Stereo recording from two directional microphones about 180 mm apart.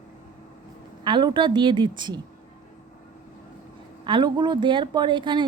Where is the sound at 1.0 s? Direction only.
25° right (ahead or behind).